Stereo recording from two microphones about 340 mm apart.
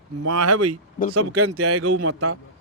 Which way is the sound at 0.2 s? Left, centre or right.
Right.